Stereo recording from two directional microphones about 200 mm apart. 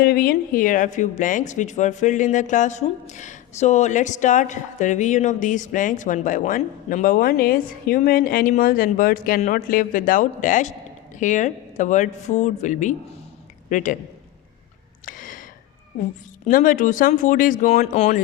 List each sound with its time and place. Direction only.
0.0 s a man's voice: 50° left (ahead or behind)
15.0 s a sound: 40° left (ahead or behind)
16.5 s speech: 40° left (ahead or behind)